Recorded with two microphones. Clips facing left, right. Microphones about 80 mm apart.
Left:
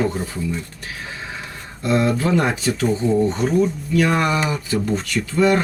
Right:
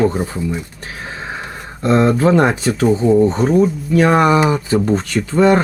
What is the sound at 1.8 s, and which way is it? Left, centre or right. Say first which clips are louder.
Speech: right 6 dB; right.